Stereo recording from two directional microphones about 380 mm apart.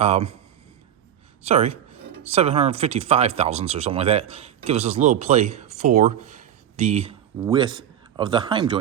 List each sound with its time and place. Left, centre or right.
0.0 s speech: centre
1.5 s speech: centre